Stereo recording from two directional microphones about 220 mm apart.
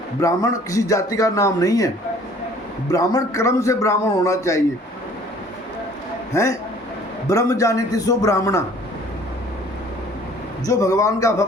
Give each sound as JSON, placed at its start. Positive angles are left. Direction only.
{"t": 0.2, "sound": "a man's voice", "side_deg": 15}
{"t": 2.9, "sound": "a man's voice", "side_deg": 15}
{"t": 6.3, "sound": "a man's voice", "side_deg": 15}
{"t": 10.7, "sound": "a man's voice", "side_deg": 15}